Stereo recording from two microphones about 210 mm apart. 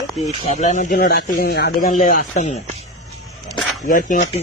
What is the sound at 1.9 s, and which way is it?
Speech, 40° left (ahead or behind).